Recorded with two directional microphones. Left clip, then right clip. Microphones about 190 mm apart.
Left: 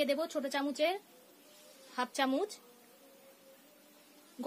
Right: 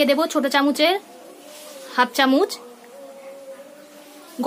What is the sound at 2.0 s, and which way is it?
Speech, 20° left (ahead or behind).